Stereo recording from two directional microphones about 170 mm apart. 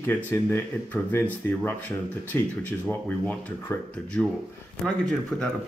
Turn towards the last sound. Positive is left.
turn(degrees=5)  # may be behind; listen again after turning